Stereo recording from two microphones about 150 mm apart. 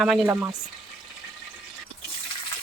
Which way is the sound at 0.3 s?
15° right (ahead or behind).